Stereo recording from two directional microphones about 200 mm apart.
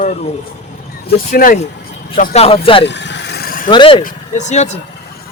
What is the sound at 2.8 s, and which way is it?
Vehicle, 60° left (ahead or behind).